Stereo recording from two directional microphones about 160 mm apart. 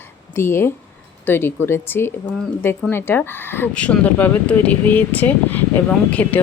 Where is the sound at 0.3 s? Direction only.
15° left (ahead or behind).